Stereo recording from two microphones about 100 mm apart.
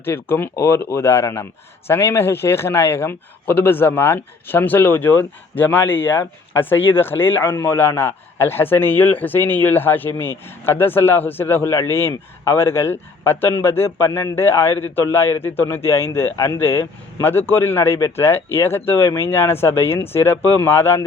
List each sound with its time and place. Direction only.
0.0 s a man's voice: 20° left (ahead or behind)